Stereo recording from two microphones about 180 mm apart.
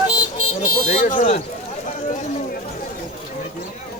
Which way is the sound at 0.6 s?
45° left (ahead or behind).